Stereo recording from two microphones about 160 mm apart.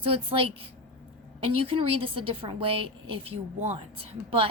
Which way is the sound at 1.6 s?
35° right (ahead or behind).